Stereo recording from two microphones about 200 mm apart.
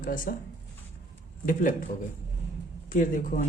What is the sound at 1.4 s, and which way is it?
Speech, 40° left (ahead or behind).